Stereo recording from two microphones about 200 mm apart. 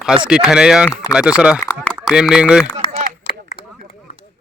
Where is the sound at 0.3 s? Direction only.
5° right (ahead or behind).